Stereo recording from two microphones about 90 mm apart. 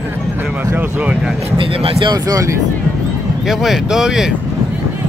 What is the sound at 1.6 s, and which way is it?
Speech, 90° right.